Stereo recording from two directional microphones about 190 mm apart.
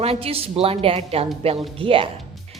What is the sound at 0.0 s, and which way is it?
A woman's voice, 30° right (ahead or behind).